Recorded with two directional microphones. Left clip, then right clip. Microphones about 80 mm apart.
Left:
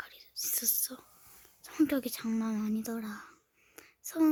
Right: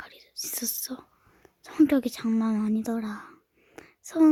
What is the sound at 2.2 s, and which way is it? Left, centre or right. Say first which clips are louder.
Speech: right 7 dB; right.